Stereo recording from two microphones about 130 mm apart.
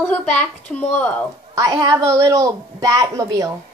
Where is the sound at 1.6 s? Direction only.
30° right (ahead or behind).